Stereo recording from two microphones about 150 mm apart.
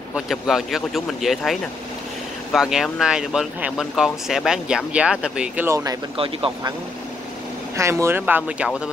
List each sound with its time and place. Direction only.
0.1 s speech: centre (ahead or behind)
6.1 s speech: 35° right (ahead or behind)
7.7 s speech: 20° right (ahead or behind)